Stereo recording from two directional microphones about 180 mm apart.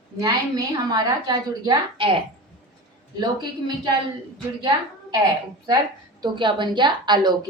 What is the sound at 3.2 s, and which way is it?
A woman's voice, 25° right (ahead or behind).